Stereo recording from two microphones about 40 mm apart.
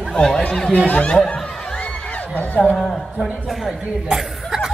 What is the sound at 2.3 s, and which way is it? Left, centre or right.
Speech, left.